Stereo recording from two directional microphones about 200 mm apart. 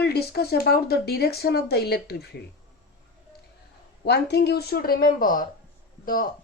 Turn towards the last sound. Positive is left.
turn(degrees=45)  # may be behind; listen again after turning